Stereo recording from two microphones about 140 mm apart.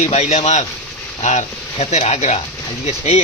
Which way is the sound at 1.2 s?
55° left (ahead or behind).